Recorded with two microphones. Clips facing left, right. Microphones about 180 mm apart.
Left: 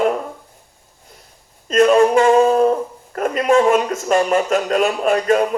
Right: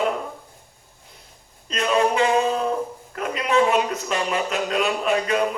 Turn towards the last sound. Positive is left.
turn(degrees=45)  # may be behind; listen again after turning